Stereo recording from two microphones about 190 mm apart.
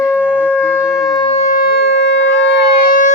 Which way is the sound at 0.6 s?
10° left (ahead or behind).